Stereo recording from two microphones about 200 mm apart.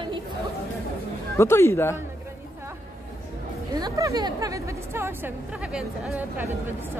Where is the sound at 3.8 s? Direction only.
15° right (ahead or behind).